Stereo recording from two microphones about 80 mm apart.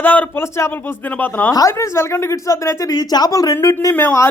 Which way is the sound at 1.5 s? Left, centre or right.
Left.